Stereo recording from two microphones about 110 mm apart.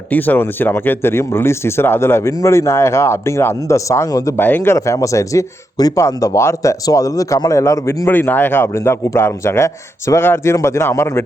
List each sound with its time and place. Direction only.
0.1 s speech: 15° left (ahead or behind)